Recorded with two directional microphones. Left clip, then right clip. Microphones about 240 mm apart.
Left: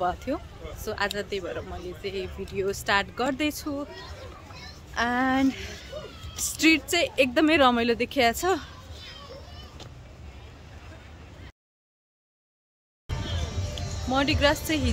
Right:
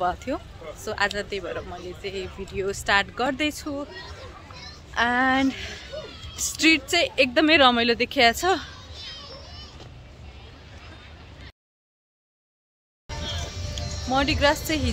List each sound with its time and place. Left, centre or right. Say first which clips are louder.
0.0 s speech: right 2 dB; centre
4.9 s speech: right 4 dB; centre
13.6 s music: right 2 dB; left
14.1 s speech: right 2 dB; centre